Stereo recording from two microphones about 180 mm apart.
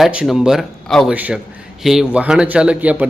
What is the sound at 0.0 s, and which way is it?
A man's voice, 5° right (ahead or behind).